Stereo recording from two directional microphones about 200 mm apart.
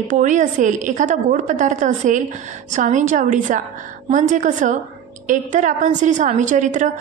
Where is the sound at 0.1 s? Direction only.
40° right (ahead or behind).